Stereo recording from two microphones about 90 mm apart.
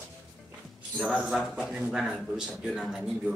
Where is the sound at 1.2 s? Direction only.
5° right (ahead or behind).